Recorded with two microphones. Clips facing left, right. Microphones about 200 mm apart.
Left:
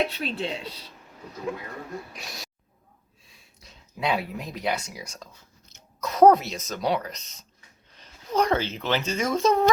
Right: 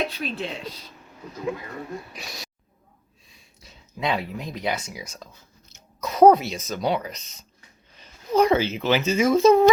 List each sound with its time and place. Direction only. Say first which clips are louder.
0.1 s a woman's voice: even; 30° left (ahead or behind)
2.1 s speech: right 2 dB; centre (ahead or behind)
3.2 s a sound: right 1 dB; centre (ahead or behind)
3.9 s speech: right 1 dB; 5° left (ahead or behind)